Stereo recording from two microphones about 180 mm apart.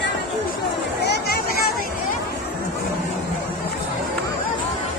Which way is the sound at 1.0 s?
65° left (ahead or behind).